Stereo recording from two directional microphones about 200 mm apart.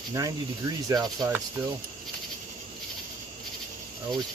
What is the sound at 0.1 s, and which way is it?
Speech, 15° right (ahead or behind).